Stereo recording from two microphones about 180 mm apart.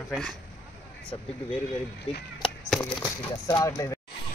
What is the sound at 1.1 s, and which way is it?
Speech, 25° left (ahead or behind).